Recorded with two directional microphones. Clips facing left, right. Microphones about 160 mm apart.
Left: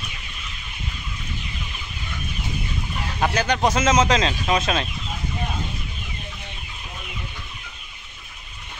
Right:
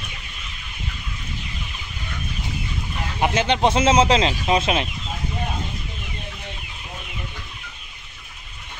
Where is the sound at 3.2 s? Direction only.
25° right (ahead or behind).